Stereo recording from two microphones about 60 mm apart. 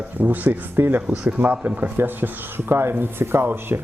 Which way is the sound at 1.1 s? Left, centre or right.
Centre.